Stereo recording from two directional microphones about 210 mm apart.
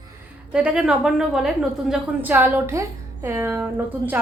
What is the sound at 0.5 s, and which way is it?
A woman's voice, 5° right (ahead or behind).